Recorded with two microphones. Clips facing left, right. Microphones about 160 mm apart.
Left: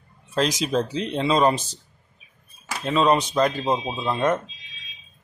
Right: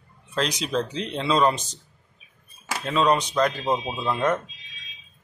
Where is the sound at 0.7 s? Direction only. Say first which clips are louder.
Left 1 dB; 5° left (ahead or behind).